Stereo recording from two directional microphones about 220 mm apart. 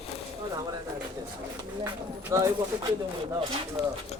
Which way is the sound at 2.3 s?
15° right (ahead or behind).